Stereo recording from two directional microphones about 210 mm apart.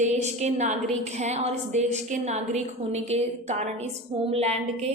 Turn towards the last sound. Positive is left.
turn(degrees=-30)  # may be behind; listen again after turning